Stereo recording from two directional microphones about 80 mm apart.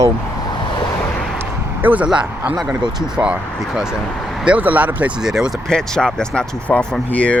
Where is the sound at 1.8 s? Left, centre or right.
Right.